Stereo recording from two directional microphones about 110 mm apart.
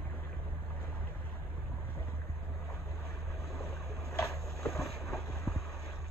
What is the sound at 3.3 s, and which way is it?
Vehicle, centre (ahead or behind).